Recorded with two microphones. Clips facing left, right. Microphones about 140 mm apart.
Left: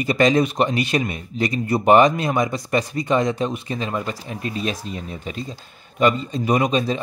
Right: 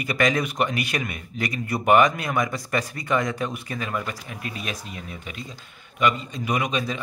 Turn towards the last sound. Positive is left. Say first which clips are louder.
# left 6 dB
turn(degrees=30)  # may be behind; listen again after turning